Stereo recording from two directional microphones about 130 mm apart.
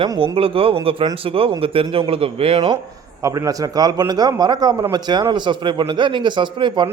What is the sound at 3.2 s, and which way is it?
A man's voice, 25° right (ahead or behind).